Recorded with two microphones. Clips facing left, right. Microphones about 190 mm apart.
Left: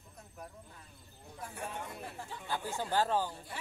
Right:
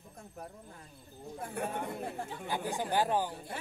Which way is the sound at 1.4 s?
55° right (ahead or behind).